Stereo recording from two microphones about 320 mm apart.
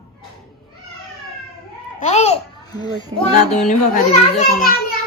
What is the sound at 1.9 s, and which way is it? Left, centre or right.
Babbling, left.